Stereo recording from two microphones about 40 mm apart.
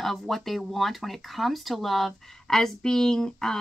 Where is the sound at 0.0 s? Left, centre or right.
Centre.